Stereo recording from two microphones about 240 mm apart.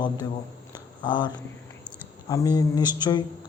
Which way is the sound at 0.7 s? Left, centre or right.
Centre.